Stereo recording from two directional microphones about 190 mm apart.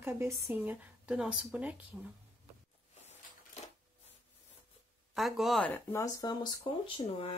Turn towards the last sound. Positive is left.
turn(degrees=25)  # may be behind; listen again after turning